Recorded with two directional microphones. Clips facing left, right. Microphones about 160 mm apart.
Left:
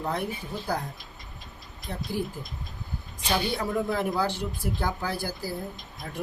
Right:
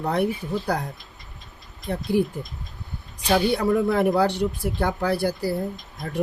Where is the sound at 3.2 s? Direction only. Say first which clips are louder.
Right 8 dB; 70° right (ahead or behind).